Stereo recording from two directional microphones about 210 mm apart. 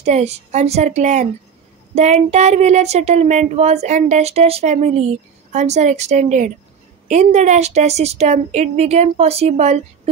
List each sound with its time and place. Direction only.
0.0 s speech: 30° right (ahead or behind)